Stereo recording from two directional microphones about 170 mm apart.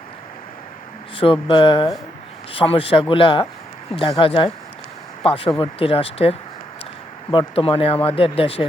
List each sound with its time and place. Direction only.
1.1 s speech: 30° left (ahead or behind)